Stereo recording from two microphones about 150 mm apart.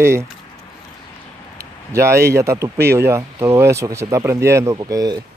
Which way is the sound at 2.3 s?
20° right (ahead or behind).